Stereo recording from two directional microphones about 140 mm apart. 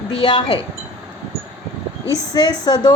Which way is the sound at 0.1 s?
35° left (ahead or behind).